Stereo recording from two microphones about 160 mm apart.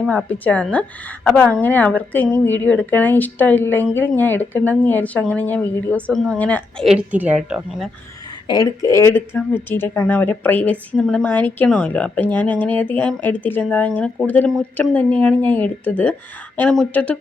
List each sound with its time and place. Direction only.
0.0 s a woman's voice: 10° left (ahead or behind)
6.8 s a woman's voice: 5° right (ahead or behind)
8.4 s a woman's voice: 20° left (ahead or behind)